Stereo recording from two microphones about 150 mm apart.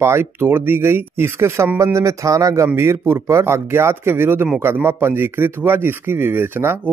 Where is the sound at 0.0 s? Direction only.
15° right (ahead or behind).